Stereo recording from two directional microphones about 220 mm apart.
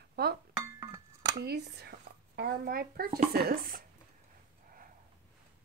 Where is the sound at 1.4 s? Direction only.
45° right (ahead or behind).